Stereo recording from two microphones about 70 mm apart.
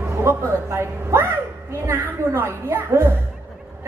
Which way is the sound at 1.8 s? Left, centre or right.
Right.